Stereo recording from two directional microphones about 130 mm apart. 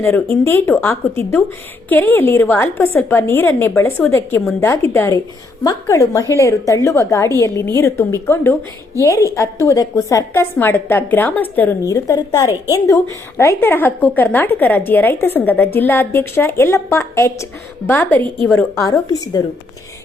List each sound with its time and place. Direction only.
0.0 s a woman's voice: 20° left (ahead or behind)
11.8 s a woman's voice: 25° left (ahead or behind)
18.5 s a woman's voice: 25° left (ahead or behind)